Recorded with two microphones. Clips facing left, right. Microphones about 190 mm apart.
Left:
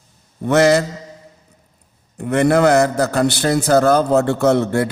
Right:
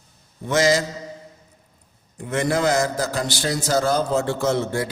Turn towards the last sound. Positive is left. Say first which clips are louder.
# left 7 dB
turn(degrees=60)  # may be behind; listen again after turning